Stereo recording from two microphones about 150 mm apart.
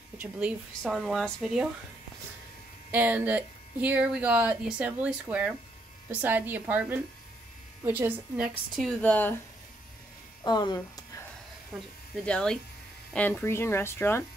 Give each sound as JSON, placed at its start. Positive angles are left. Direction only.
{"t": 0.2, "sound": "speech", "side_deg": -10}
{"t": 2.9, "sound": "speech", "side_deg": -15}
{"t": 8.7, "sound": "speech", "side_deg": 5}
{"t": 10.4, "sound": "speech", "side_deg": 30}
{"t": 12.2, "sound": "speech", "side_deg": 5}